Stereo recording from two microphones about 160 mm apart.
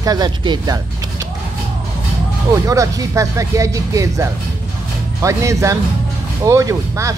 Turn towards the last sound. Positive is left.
turn(degrees=-20)  # may be behind; listen again after turning